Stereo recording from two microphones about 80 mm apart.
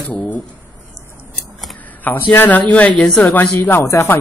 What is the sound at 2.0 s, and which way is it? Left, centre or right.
Speech, left.